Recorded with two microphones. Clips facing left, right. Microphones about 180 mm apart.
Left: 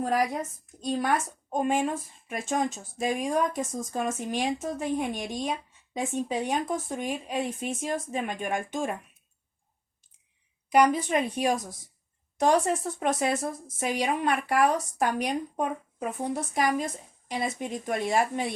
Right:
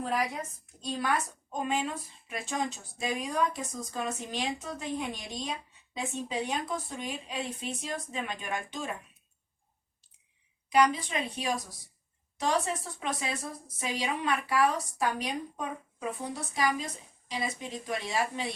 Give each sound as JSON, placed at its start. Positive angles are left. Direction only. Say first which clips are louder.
{"t": 0.0, "sound": "a woman's voice", "louder": "left 5 dB", "side_deg": 45}
{"t": 10.7, "sound": "a woman's voice", "louder": "left 4 dB", "side_deg": 50}